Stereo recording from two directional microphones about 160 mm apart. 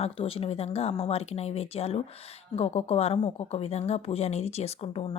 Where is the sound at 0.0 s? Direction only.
35° left (ahead or behind).